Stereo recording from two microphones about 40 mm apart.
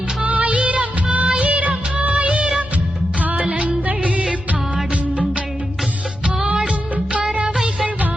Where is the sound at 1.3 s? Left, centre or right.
Right.